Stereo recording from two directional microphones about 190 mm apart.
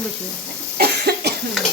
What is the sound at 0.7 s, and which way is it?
Cough, 60° right (ahead or behind).